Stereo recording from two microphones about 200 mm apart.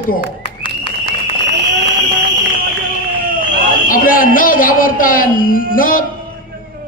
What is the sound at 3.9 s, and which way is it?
A man's voice, 45° left (ahead or behind).